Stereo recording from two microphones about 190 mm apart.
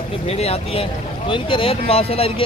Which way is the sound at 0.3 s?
35° left (ahead or behind).